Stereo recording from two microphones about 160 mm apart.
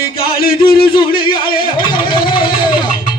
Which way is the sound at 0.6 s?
30° left (ahead or behind).